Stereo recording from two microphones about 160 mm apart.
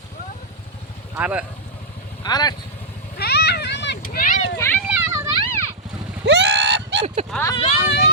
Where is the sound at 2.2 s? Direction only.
25° left (ahead or behind).